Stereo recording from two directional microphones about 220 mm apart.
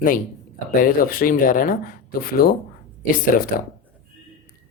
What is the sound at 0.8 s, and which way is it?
A man's voice, 40° left (ahead or behind).